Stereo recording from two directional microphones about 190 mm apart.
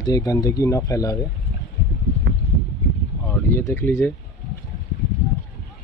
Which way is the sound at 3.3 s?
10° left (ahead or behind).